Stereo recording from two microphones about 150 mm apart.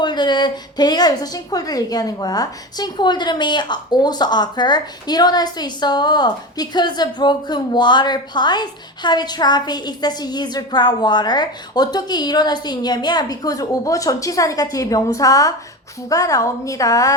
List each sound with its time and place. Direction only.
0.0 s speech: 30° left (ahead or behind)